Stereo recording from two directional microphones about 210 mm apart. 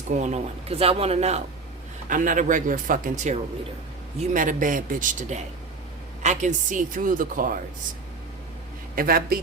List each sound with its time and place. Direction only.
0.2 s a woman's voice: 30° right (ahead or behind)
4.4 s a woman's voice: 40° right (ahead or behind)
9.0 s speech: 45° right (ahead or behind)